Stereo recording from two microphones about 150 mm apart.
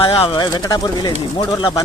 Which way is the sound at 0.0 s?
35° left (ahead or behind).